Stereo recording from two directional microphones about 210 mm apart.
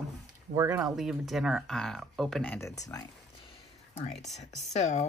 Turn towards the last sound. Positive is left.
turn(degrees=35)  # may be behind; listen again after turning